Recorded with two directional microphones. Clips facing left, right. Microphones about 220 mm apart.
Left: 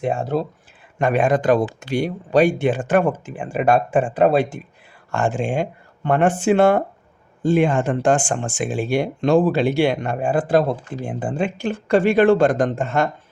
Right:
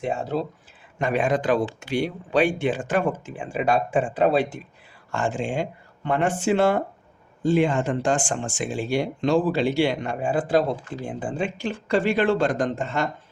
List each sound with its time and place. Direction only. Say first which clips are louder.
0.0 s speech: left 4 dB; 50° left (ahead or behind)